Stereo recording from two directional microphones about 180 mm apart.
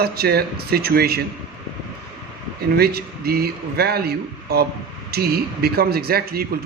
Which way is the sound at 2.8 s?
60° right (ahead or behind).